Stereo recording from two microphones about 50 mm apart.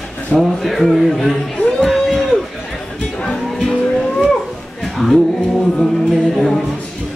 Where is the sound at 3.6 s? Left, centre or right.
Centre.